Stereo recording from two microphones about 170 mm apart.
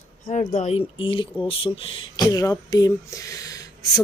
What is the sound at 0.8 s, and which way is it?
Speech, 30° left (ahead or behind).